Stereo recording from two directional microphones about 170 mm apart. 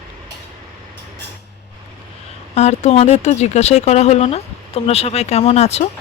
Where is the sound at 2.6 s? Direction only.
40° left (ahead or behind).